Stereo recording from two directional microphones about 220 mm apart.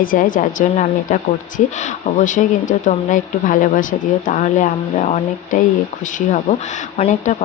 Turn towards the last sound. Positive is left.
turn(degrees=35)  # may be behind; listen again after turning